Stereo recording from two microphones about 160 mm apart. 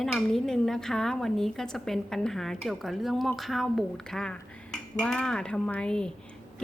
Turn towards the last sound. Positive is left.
turn(degrees=5)  # may be behind; listen again after turning